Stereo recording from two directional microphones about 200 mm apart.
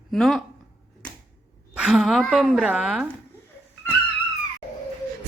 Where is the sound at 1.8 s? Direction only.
5° right (ahead or behind).